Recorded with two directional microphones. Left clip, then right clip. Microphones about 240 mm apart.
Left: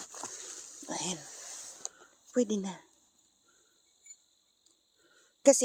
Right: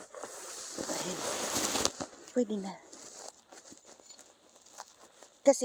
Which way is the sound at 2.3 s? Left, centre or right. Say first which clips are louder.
Left 2 dB; left.